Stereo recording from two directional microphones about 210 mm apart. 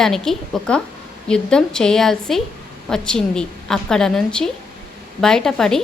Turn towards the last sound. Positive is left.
turn(degrees=0)  # may be behind; listen again after turning